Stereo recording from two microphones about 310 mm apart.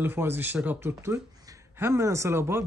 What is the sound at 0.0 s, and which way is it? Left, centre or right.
Speech, centre.